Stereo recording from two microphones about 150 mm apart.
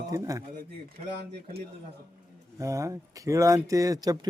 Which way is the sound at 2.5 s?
20° right (ahead or behind).